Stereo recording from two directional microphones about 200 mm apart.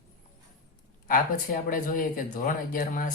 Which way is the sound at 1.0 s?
45° left (ahead or behind).